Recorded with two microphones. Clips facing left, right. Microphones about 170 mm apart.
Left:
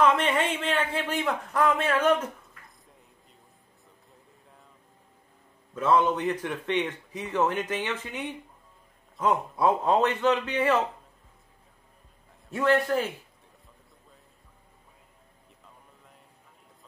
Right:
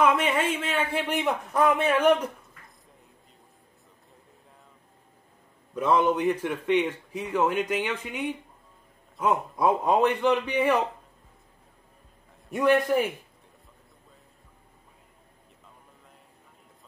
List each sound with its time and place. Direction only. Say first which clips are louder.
0.0 s a man's voice: even; 10° right (ahead or behind)
5.8 s speech: right 1 dB; 10° right (ahead or behind)
12.4 s speech: right 2 dB; 15° right (ahead or behind)